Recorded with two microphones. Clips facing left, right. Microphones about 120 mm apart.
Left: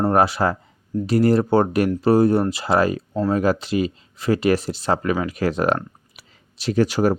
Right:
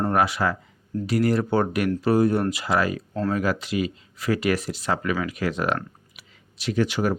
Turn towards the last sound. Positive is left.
turn(degrees=40)  # may be behind; listen again after turning